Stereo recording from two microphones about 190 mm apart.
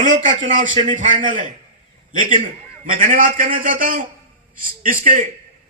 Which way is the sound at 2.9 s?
45° right (ahead or behind).